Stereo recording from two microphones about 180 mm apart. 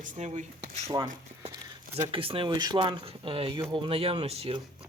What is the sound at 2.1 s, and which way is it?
Speech, 30° right (ahead or behind).